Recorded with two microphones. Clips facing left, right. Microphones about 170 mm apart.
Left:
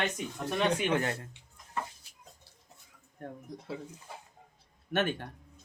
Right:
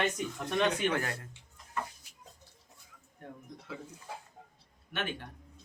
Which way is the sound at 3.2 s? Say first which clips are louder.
Left 5 dB; 45° left (ahead or behind).